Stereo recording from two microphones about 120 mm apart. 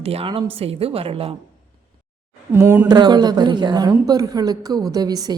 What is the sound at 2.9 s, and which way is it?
A woman's voice, 35° right (ahead or behind).